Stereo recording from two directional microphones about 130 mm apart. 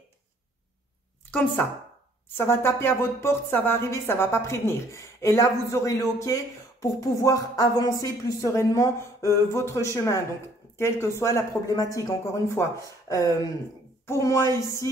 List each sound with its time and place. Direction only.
2.2 s speech: 20° left (ahead or behind)